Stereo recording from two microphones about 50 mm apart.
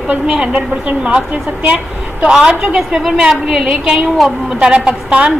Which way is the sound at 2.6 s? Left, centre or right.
Centre.